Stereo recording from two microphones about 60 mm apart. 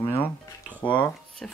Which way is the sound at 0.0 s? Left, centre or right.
Left.